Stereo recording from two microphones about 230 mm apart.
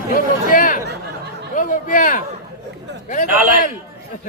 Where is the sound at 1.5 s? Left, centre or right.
Left.